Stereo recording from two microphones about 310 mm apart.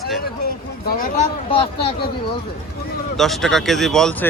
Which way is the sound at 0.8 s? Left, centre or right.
Left.